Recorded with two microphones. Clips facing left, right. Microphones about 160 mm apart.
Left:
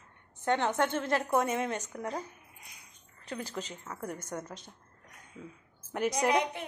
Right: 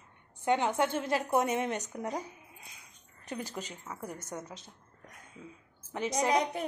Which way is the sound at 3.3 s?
15° right (ahead or behind).